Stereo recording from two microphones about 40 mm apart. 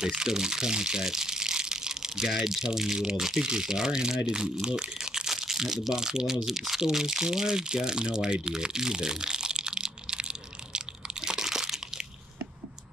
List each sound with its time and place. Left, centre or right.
0.0 s speech: centre
10.7 s crunch: centre